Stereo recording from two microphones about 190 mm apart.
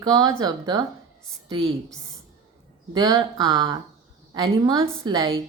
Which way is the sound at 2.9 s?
20° right (ahead or behind).